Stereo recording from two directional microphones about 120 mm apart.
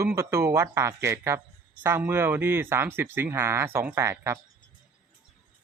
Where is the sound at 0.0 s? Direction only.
20° right (ahead or behind).